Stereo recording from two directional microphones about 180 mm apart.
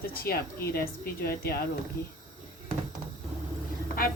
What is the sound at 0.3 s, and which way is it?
Speech, 55° left (ahead or behind).